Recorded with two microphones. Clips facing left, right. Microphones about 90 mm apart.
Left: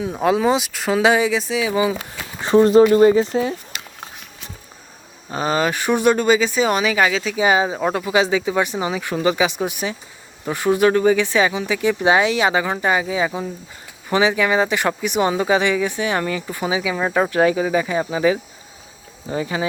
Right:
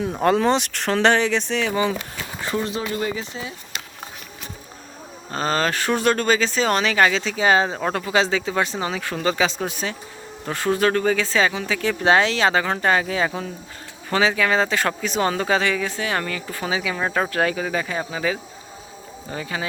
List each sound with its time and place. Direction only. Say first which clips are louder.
0.0 s speech: left 1 dB; centre (ahead or behind)
2.6 s speech: left 15 dB; 45° left (ahead or behind)
5.3 s speech: left 2 dB; 10° left (ahead or behind)